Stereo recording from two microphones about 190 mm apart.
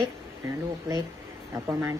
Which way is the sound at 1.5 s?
15° right (ahead or behind).